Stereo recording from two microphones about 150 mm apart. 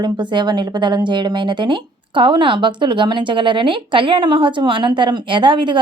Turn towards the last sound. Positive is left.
turn(degrees=-30)  # may be behind; listen again after turning